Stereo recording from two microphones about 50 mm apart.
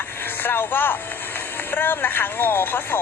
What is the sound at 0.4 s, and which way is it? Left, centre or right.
Speech, left.